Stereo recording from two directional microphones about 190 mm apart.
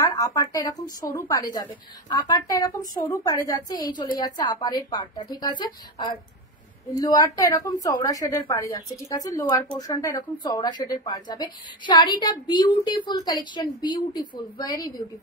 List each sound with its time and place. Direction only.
0.0 s a woman's voice: 20° left (ahead or behind)